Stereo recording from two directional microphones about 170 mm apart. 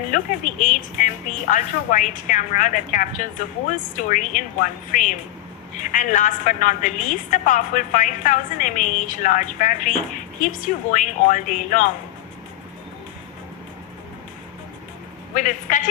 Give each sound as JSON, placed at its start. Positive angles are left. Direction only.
{"t": 0.1, "sound": "a woman's voice", "side_deg": 50}
{"t": 10.9, "sound": "a woman's voice", "side_deg": 50}
{"t": 15.4, "sound": "a woman's voice", "side_deg": 50}